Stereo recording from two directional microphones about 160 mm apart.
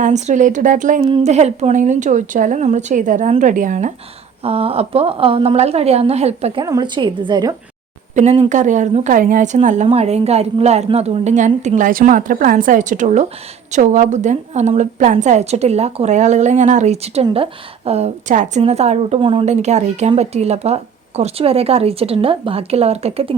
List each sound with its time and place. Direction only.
0.0 s a woman's voice: 50° right (ahead or behind)
4.4 s speech: 40° right (ahead or behind)
6.7 s speech: 25° right (ahead or behind)
8.1 s a woman's voice: 45° right (ahead or behind)
19.5 s speech: 45° right (ahead or behind)